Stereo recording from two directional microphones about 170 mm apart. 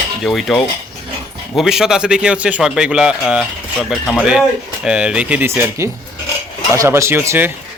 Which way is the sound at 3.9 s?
5° left (ahead or behind).